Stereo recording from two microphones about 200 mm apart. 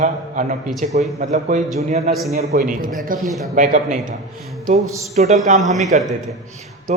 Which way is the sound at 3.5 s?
40° right (ahead or behind).